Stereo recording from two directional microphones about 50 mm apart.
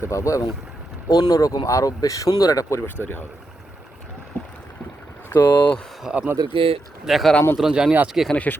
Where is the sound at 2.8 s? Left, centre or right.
Left.